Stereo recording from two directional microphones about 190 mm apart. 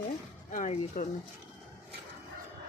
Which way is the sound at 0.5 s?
40° left (ahead or behind).